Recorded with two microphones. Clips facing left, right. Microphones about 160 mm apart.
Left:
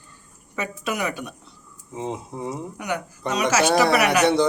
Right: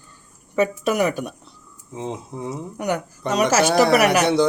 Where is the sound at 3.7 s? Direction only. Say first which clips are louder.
Right 2 dB; centre (ahead or behind).